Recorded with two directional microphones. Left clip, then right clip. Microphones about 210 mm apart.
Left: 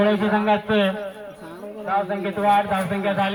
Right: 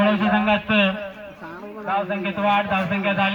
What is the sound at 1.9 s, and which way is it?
A man's voice, 35° left (ahead or behind).